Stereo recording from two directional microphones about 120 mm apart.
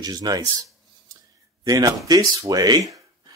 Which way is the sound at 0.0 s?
35° right (ahead or behind).